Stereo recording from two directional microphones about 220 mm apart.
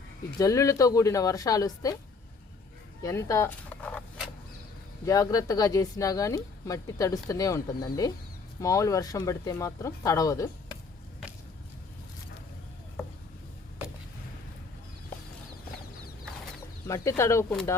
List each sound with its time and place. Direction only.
0.3 s speech: 15° left (ahead or behind)
3.0 s speech: 15° left (ahead or behind)
16.8 s speech: 15° left (ahead or behind)